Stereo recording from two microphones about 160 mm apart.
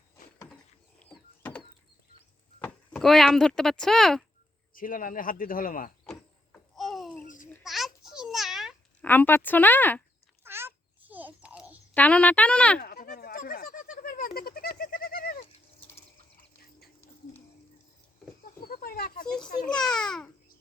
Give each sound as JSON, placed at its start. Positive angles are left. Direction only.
{"t": 1.4, "sound": "a sound", "side_deg": 10}
{"t": 2.6, "sound": "speech", "side_deg": 10}
{"t": 4.7, "sound": "speech", "side_deg": 60}
{"t": 6.1, "sound": "vehicle", "side_deg": 0}
{"t": 7.6, "sound": "babbling", "side_deg": 0}
{"t": 9.0, "sound": "speech", "side_deg": 10}
{"t": 10.4, "sound": "babbling", "side_deg": -15}
{"t": 11.9, "sound": "speech", "side_deg": 10}
{"t": 12.8, "sound": "goat", "side_deg": 70}
{"t": 18.6, "sound": "a sound", "side_deg": 65}
{"t": 19.6, "sound": "a child's voice", "side_deg": 5}